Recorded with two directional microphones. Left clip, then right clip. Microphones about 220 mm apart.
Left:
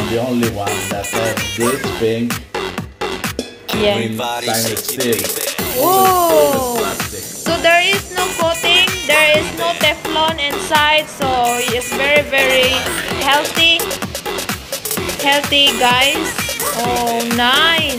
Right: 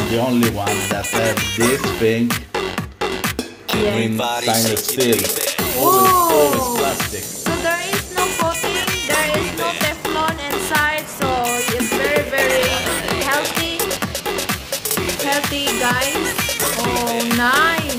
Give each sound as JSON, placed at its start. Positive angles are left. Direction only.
{"t": 0.7, "sound": "music", "side_deg": 0}
{"t": 3.7, "sound": "music", "side_deg": 0}
{"t": 7.4, "sound": "speech", "side_deg": 0}
{"t": 15.2, "sound": "music", "side_deg": 0}